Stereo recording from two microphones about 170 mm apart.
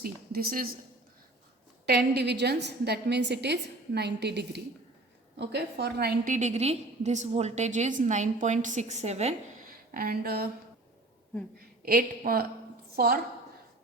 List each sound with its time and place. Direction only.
0.0 s a woman's voice: 60° right (ahead or behind)
1.9 s a woman's voice: 75° right (ahead or behind)
6.3 s a woman's voice: 40° right (ahead or behind)
9.6 s speech: 60° right (ahead or behind)
11.8 s a woman's voice: 55° right (ahead or behind)